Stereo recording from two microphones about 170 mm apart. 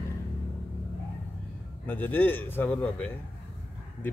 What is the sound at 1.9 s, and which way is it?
Speech, 10° left (ahead or behind).